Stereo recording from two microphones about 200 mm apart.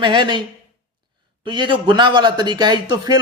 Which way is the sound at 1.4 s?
25° right (ahead or behind).